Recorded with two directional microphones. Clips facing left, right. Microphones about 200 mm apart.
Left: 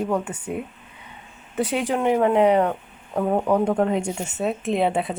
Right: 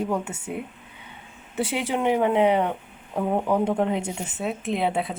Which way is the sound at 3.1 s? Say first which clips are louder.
Left 3 dB; 5° right (ahead or behind).